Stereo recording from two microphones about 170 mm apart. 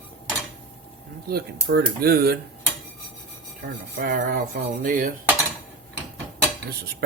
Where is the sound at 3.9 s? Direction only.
60° right (ahead or behind).